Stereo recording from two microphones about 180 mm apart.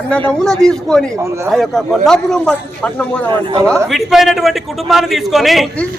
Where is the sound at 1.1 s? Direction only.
15° right (ahead or behind).